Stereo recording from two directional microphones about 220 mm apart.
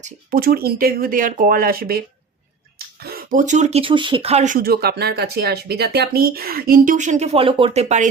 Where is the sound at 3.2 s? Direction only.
35° right (ahead or behind).